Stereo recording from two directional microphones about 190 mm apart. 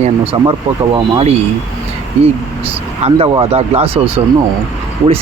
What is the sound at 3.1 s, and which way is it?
Speech, 30° right (ahead or behind).